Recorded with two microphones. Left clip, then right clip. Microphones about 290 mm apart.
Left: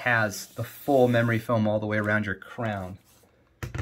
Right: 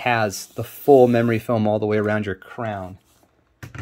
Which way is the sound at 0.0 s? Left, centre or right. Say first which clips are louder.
Right 4 dB; right.